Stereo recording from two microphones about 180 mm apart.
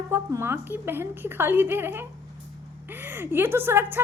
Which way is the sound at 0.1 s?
15° right (ahead or behind).